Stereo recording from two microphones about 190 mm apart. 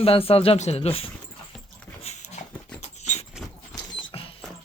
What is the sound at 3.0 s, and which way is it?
Dog, 35° left (ahead or behind).